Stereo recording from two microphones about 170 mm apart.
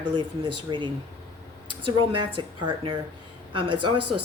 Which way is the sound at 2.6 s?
25° right (ahead or behind).